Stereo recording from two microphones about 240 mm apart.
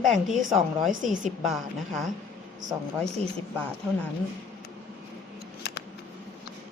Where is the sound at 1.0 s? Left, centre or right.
Right.